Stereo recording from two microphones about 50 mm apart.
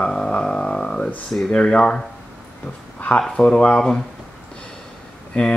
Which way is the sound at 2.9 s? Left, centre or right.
Left.